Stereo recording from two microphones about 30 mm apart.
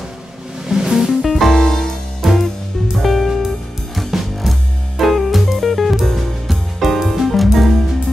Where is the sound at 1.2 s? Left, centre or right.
Centre.